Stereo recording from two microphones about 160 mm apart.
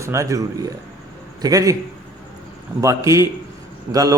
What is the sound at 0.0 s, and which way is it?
A man's voice, 20° right (ahead or behind).